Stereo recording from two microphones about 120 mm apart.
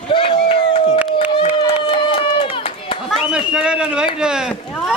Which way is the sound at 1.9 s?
45° left (ahead or behind).